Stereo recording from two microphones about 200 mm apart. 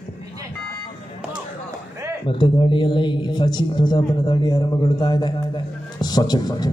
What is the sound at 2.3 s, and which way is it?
A man's voice, 25° left (ahead or behind).